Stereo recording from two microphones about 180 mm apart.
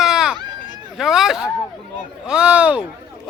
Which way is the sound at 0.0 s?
5° right (ahead or behind).